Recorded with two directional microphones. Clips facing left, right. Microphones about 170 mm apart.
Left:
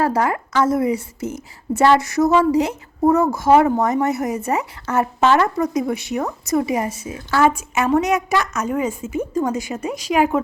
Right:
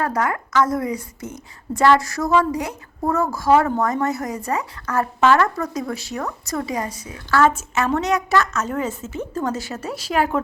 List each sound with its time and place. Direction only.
0.0 s a woman's voice: 30° left (ahead or behind); by 10.4 s 10° left (ahead or behind)